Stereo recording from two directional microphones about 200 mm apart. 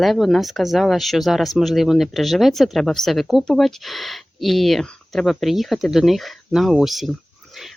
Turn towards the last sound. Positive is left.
turn(degrees=0)  # may be behind; listen again after turning